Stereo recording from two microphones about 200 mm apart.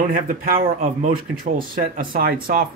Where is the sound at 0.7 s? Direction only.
45° right (ahead or behind).